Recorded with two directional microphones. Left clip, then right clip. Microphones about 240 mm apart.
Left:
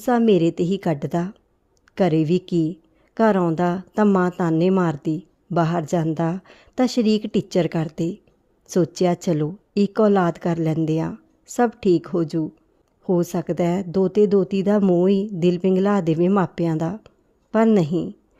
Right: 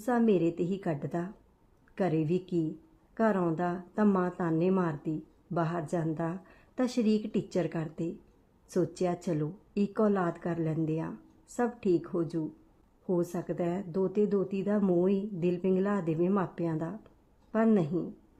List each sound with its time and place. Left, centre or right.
0.0 s speech: left